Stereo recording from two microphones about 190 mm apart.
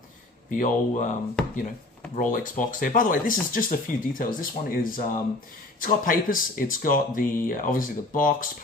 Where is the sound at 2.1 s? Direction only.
45° left (ahead or behind).